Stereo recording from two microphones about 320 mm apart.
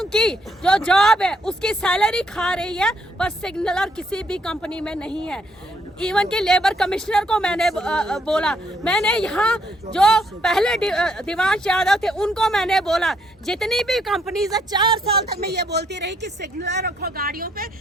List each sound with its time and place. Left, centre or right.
0.0 s speech: centre
14.5 s speech: centre
15.3 s speech: right